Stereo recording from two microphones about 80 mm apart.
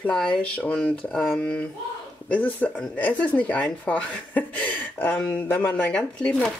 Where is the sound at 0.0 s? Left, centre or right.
Centre.